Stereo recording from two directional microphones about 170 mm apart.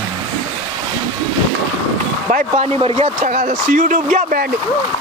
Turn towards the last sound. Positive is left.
turn(degrees=-50)  # may be behind; listen again after turning